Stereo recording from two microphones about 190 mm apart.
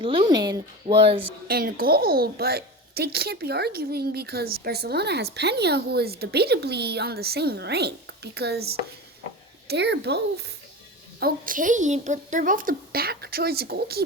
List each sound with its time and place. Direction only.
0.0 s speech: 25° right (ahead or behind)
1.5 s a child's voice: 50° right (ahead or behind)
11.2 s a woman's voice: 50° right (ahead or behind)